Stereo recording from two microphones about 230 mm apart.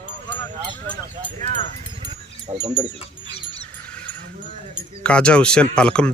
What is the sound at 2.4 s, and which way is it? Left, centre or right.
Speech, right.